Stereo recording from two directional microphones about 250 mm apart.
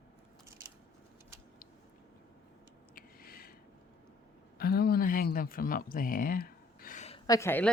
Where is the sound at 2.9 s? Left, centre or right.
Left.